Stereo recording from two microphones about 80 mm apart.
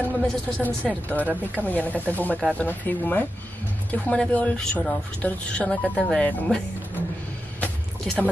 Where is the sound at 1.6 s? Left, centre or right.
Left.